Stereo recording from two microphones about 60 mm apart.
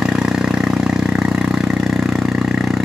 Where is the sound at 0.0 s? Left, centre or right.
Centre.